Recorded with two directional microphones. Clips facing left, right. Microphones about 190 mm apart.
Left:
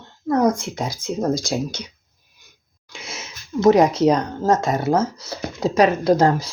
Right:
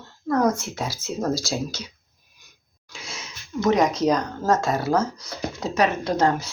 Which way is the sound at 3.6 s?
30° left (ahead or behind).